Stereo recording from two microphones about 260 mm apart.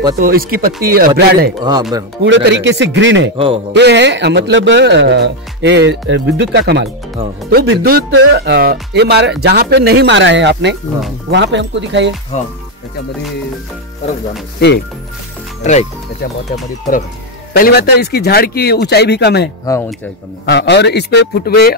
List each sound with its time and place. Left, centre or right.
0.2 s speech: right
1.6 s speech: centre
2.2 s a man's voice: right
3.3 s a man's voice: right
3.7 s a man's voice: right
15.6 s speech: left
17.6 s speech: left